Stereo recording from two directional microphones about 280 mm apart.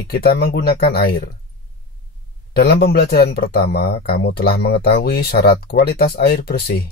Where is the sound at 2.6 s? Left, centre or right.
Left.